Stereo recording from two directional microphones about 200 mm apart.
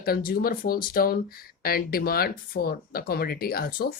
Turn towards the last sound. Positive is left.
turn(degrees=50)  # may be behind; listen again after turning